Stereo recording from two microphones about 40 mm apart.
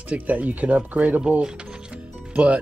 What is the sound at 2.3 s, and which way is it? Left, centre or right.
Speech, right.